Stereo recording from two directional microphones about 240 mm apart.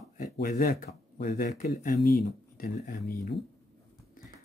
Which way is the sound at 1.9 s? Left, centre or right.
Left.